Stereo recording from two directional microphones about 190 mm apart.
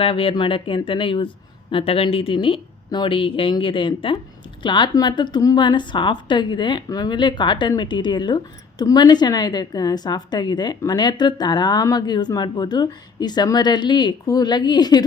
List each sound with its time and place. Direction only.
0.0 s a woman's voice: 30° left (ahead or behind)